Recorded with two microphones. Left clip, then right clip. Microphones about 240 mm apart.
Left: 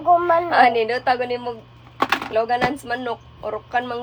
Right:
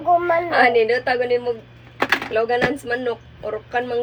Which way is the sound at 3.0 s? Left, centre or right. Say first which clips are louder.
Right 2 dB; left.